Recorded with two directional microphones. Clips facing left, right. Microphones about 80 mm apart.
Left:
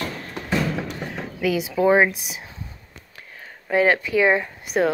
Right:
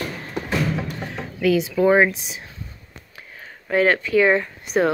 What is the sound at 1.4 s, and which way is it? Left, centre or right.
A woman's voice, centre.